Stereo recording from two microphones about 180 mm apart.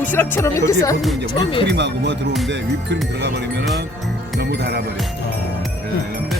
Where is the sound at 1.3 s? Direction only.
25° left (ahead or behind).